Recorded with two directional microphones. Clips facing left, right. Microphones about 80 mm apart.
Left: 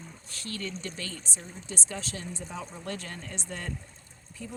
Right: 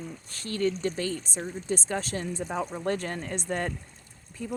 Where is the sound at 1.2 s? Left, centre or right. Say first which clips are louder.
Right 8 dB; right.